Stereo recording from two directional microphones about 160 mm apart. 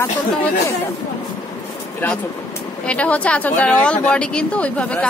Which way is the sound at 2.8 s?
10° left (ahead or behind).